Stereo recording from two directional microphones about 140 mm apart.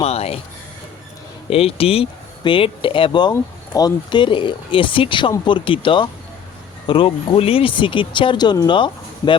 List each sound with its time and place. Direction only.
0.0 s speech: 45° left (ahead or behind)
1.5 s speech: 45° left (ahead or behind)